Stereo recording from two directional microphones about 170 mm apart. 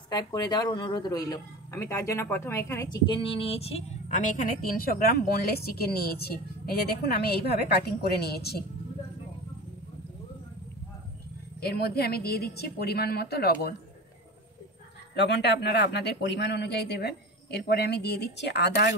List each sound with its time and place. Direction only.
0.1 s speech: 25° left (ahead or behind); by 8.5 s 70° left (ahead or behind)
11.6 s a woman's voice: 65° left (ahead or behind)
15.1 s a man's voice: 90° left